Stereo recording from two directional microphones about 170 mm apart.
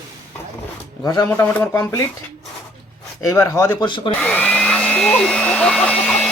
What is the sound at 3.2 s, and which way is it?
Speech, 20° left (ahead or behind).